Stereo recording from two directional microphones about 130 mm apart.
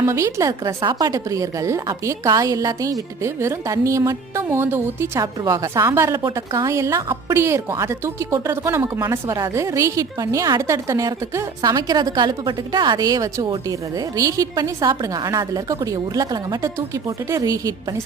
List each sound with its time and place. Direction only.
0.0 s a woman's voice: 20° right (ahead or behind)